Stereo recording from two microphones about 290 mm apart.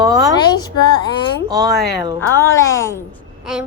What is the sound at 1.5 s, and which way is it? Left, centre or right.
Speech, centre.